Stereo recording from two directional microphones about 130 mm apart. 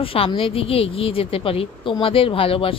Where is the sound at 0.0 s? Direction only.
45° left (ahead or behind).